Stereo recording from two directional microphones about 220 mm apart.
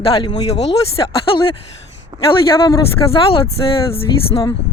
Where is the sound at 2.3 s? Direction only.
15° left (ahead or behind).